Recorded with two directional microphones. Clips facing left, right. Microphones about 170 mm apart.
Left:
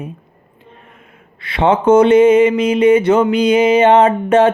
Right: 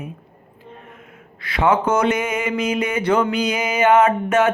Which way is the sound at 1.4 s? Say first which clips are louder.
Left 4 dB; 25° left (ahead or behind).